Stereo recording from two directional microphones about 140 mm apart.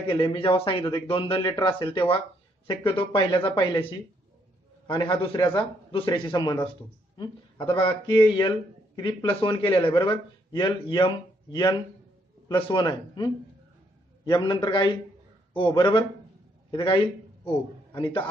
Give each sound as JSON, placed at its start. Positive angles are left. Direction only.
{"t": 0.1, "sound": "a man's voice", "side_deg": 35}